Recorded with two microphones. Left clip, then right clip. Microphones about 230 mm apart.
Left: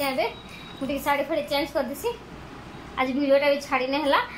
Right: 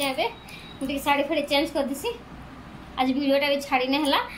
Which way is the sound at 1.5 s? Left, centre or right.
Left.